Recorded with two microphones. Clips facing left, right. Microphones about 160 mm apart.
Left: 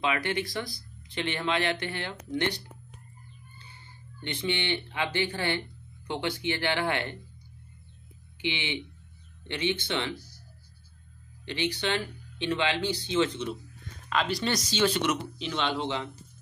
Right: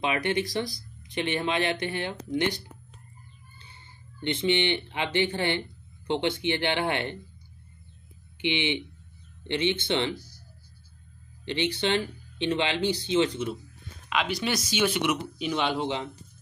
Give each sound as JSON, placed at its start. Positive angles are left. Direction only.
{"t": 0.0, "sound": "speech", "side_deg": -20}
{"t": 4.2, "sound": "speech", "side_deg": -25}
{"t": 8.4, "sound": "speech", "side_deg": -20}
{"t": 11.4, "sound": "speech", "side_deg": -25}
{"t": 14.0, "sound": "speech", "side_deg": -5}
{"t": 14.7, "sound": "speech", "side_deg": -15}